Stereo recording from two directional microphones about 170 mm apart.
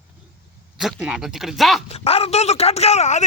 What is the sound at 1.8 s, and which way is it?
Speech, 35° left (ahead or behind).